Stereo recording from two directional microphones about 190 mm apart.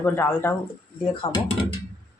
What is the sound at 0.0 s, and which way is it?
Speech, 10° left (ahead or behind).